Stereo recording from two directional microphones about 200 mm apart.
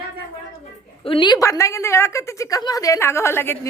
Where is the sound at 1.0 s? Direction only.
25° left (ahead or behind).